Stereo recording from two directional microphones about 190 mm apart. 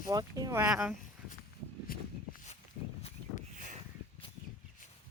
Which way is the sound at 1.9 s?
50° left (ahead or behind).